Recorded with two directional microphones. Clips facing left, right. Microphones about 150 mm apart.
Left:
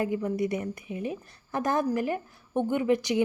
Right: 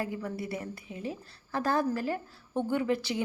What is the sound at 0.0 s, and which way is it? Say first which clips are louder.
A woman's voice: left 7 dB; 20° left (ahead or behind).